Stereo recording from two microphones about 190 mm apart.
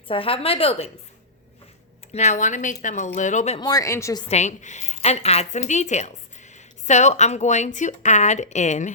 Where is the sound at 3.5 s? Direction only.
20° left (ahead or behind).